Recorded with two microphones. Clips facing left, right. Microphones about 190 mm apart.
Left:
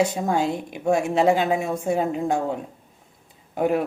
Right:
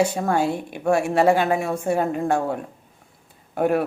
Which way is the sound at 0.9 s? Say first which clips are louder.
Right 1 dB; 20° left (ahead or behind).